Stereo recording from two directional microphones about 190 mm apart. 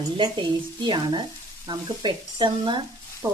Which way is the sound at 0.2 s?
25° right (ahead or behind).